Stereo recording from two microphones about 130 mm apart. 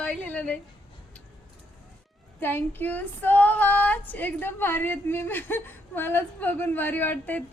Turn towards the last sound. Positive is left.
turn(degrees=15)  # may be behind; listen again after turning